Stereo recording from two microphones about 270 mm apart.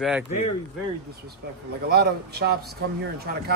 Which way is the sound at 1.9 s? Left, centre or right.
Right.